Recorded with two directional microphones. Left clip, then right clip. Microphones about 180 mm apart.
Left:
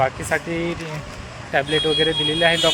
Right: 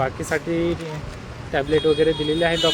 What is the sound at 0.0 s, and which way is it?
Speech, centre (ahead or behind).